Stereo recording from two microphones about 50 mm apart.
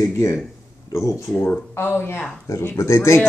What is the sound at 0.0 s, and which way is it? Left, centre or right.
Speech, left.